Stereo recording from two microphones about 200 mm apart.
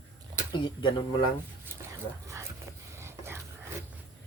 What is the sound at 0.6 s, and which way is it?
Speech, 25° left (ahead or behind).